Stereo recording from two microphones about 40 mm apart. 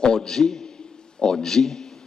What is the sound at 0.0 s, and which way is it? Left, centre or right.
A man's voice, centre.